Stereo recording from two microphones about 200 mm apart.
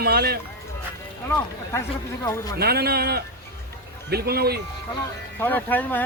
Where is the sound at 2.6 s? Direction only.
50° right (ahead or behind).